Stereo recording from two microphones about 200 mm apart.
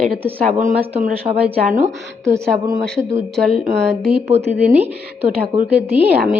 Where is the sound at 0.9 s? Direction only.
40° right (ahead or behind).